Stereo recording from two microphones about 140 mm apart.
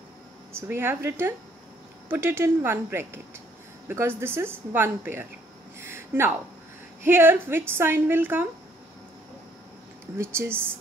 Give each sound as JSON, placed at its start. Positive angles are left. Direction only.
{"t": 0.6, "sound": "a woman's voice", "side_deg": -15}
{"t": 4.2, "sound": "a woman's voice", "side_deg": -15}
{"t": 5.8, "sound": "a sound", "side_deg": -15}
{"t": 7.1, "sound": "a woman's voice", "side_deg": -15}
{"t": 10.1, "sound": "a woman's voice", "side_deg": -15}